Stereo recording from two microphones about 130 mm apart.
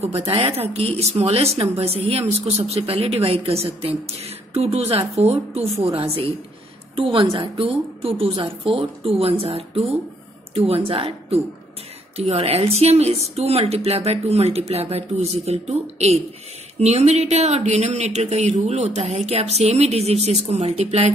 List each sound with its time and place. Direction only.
0.0 s speech: 50° right (ahead or behind)